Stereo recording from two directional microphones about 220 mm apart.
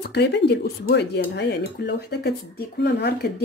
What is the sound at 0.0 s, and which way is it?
Speech, 50° left (ahead or behind).